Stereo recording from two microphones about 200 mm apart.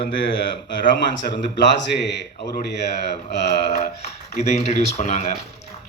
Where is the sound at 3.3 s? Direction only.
55° left (ahead or behind).